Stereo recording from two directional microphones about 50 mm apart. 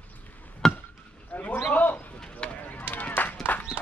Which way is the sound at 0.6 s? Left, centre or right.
Centre.